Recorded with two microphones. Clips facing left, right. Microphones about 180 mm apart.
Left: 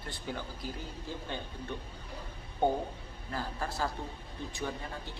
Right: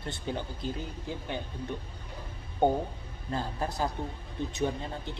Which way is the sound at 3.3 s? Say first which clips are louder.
Right 4 dB; 20° right (ahead or behind).